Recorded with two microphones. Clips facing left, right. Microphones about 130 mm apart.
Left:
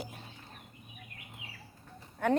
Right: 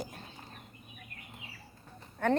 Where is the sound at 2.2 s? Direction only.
5° left (ahead or behind).